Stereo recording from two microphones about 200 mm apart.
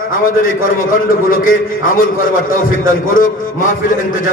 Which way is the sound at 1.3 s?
45° left (ahead or behind).